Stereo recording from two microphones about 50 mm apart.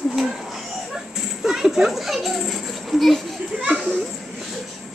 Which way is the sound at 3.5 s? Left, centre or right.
Right.